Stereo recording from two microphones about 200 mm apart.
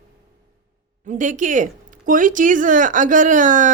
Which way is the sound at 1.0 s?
40° right (ahead or behind).